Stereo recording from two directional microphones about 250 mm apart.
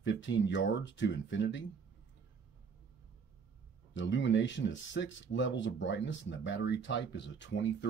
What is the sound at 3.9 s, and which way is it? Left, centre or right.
Speech, left.